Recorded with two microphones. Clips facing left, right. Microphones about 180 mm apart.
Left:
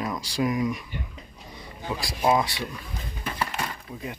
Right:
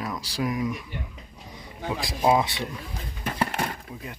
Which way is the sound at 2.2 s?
20° right (ahead or behind).